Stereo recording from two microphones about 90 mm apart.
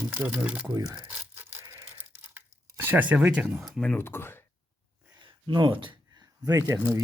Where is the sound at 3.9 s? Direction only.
25° left (ahead or behind).